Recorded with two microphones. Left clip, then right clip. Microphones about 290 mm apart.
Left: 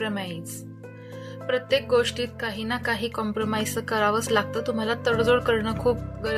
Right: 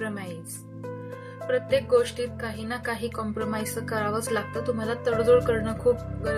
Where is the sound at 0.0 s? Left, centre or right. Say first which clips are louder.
Left 4 dB; left.